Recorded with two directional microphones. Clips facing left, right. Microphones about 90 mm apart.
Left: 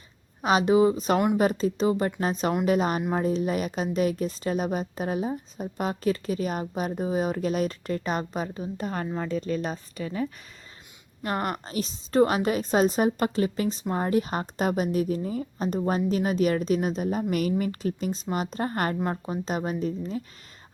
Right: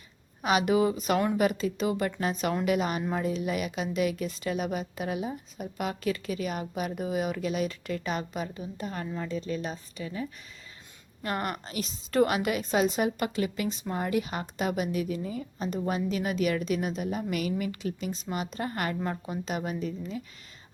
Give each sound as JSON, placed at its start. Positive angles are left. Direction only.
{"t": 0.4, "sound": "a woman's voice", "side_deg": 30}
{"t": 11.2, "sound": "a woman's voice", "side_deg": 30}